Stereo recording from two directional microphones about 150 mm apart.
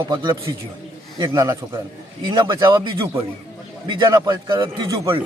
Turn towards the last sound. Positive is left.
turn(degrees=-25)  # may be behind; listen again after turning